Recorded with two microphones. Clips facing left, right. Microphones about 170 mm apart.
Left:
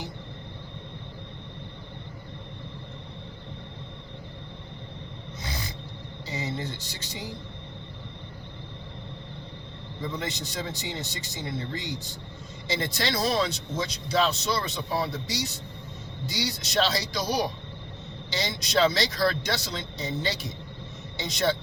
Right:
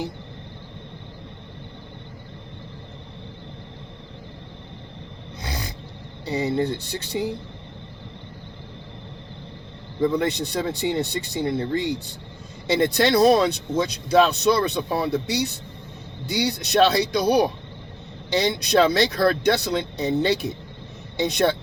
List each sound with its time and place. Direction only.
6.2 s speech: 60° right (ahead or behind)
10.0 s speech: 60° right (ahead or behind)